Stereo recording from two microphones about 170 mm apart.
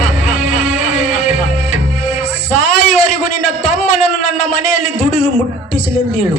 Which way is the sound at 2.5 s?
55° left (ahead or behind).